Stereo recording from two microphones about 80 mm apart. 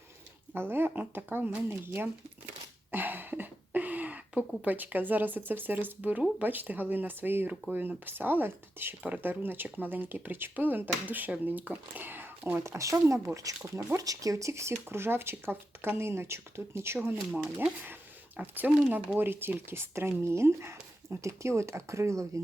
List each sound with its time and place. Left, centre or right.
0.5 s speech: right
2.9 s a sound: right
5.5 s speech: right
12.7 s speech: right
17.1 s speech: right